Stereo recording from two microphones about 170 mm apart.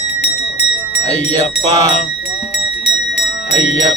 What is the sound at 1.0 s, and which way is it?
Speech, 40° left (ahead or behind).